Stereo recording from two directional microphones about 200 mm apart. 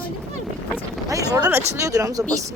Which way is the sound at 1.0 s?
15° right (ahead or behind).